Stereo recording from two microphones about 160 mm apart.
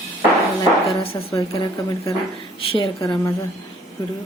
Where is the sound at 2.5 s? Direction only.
35° left (ahead or behind).